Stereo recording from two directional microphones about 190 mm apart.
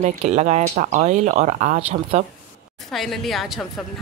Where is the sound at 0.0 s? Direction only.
40° right (ahead or behind).